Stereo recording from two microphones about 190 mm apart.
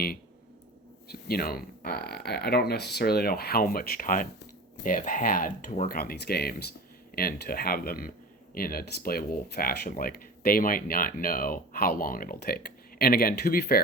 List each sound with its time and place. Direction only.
1.3 s speech: 50° left (ahead or behind)
6.0 s speech: 55° left (ahead or behind)